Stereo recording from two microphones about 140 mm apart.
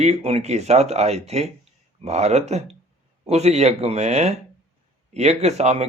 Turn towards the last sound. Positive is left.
turn(degrees=-50)  # may be behind; listen again after turning